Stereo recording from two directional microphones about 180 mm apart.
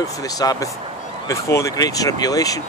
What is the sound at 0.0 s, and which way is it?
Speech, 20° left (ahead or behind).